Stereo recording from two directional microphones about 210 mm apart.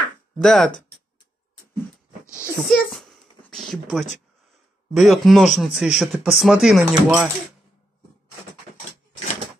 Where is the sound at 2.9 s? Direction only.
Centre (ahead or behind).